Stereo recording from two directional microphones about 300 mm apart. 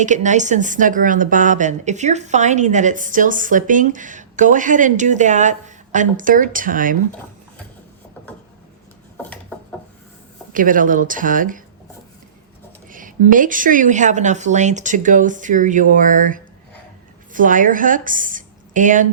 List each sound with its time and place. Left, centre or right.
0.0 s a woman's voice: right
10.5 s a woman's voice: right
12.9 s a woman's voice: right